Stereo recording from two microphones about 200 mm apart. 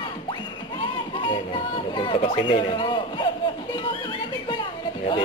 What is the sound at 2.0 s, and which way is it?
Speech, 25° left (ahead or behind).